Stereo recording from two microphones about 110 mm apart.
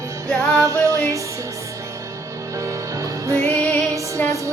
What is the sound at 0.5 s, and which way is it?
Music, 30° right (ahead or behind).